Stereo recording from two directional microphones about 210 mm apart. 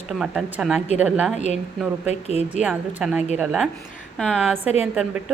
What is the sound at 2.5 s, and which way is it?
Speech, 5° right (ahead or behind).